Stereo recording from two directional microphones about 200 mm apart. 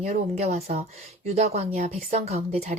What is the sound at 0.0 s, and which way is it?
Speech, 35° right (ahead or behind).